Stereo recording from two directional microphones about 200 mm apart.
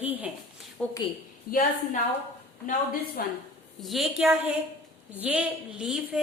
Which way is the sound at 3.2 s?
45° left (ahead or behind).